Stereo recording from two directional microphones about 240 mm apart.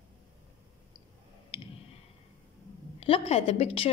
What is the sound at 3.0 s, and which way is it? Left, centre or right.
Speech, left.